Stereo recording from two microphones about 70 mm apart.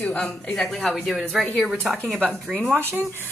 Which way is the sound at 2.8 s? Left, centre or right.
Right.